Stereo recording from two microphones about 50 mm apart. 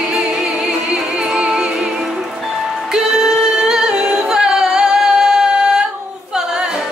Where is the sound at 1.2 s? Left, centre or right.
Centre.